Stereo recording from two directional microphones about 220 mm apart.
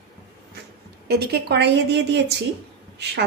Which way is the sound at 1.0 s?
45° right (ahead or behind).